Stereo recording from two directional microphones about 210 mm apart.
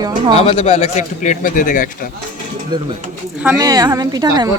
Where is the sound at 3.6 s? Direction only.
15° right (ahead or behind).